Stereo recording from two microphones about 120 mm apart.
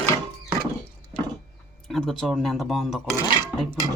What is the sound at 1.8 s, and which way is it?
Speech, 5° left (ahead or behind).